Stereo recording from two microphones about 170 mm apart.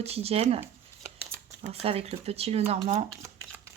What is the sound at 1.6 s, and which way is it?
Speech, 35° right (ahead or behind).